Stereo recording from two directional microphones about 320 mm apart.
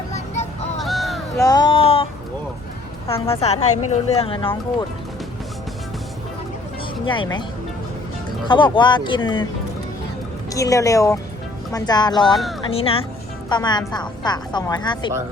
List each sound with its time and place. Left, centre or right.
0.8 s a sound: centre
1.5 s a sound: centre
3.1 s a woman's voice: centre
7.0 s a woman's voice: centre
8.4 s a woman's voice: centre
10.5 s a woman's voice: centre